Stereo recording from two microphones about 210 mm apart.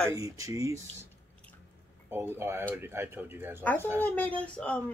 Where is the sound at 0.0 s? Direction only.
15° right (ahead or behind).